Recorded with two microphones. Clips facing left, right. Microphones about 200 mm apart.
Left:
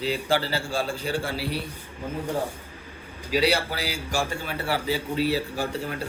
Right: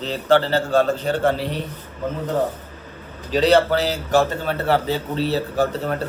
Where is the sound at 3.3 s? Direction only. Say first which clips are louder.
Right 8 dB; 10° left (ahead or behind).